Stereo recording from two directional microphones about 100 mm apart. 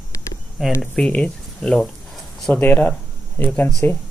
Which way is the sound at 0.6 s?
5° right (ahead or behind).